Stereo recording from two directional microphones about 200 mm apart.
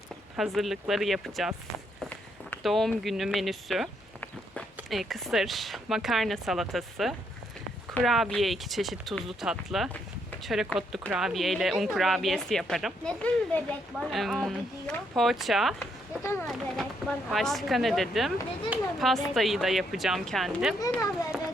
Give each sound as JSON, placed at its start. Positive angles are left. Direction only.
{"t": 0.3, "sound": "speech", "side_deg": 0}
{"t": 15.8, "sound": "a sound", "side_deg": 10}
{"t": 16.5, "sound": "speech", "side_deg": 0}
{"t": 20.7, "sound": "speech", "side_deg": 15}